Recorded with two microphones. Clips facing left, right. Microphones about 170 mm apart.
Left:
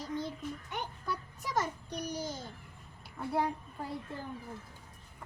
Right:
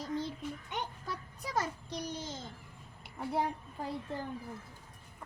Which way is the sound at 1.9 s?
30° right (ahead or behind).